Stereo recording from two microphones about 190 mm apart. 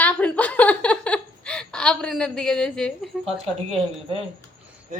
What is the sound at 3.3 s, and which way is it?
Speech, 30° right (ahead or behind).